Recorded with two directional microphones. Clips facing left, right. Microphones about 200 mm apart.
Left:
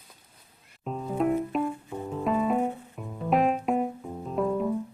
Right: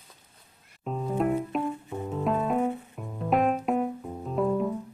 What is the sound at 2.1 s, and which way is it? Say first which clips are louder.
Piano: left 1 dB; centre (ahead or behind).